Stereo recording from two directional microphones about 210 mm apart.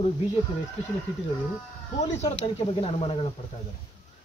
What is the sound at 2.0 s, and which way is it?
Speech, 30° left (ahead or behind).